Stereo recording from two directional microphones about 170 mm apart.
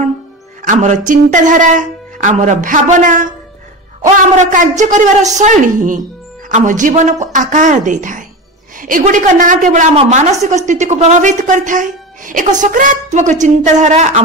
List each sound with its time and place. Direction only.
0.6 s a woman's voice: 45° right (ahead or behind)